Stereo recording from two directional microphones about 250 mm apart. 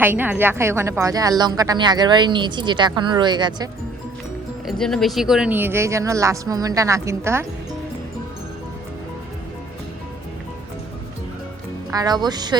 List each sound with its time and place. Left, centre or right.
0.0 s a woman's voice: centre
4.6 s a woman's voice: centre
11.9 s a woman's voice: centre